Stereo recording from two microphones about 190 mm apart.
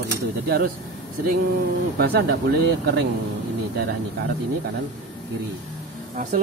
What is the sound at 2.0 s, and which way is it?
Speech, 55° right (ahead or behind).